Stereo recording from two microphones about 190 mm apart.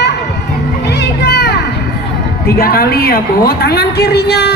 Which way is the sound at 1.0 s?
60° left (ahead or behind).